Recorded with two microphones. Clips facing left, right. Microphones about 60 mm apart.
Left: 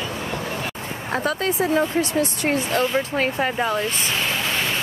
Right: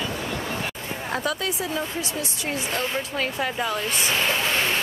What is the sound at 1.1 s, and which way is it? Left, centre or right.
Speech, left.